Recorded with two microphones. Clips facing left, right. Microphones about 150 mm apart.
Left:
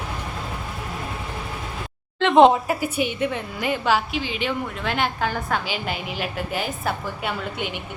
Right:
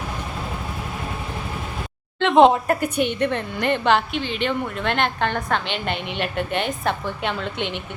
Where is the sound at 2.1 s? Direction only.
Centre (ahead or behind).